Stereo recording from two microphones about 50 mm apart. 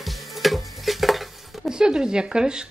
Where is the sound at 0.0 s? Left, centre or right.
Centre.